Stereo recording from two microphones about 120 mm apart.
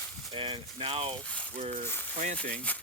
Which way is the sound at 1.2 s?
10° left (ahead or behind).